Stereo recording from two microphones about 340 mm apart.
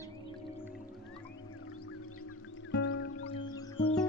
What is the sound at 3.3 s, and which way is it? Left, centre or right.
Music, centre.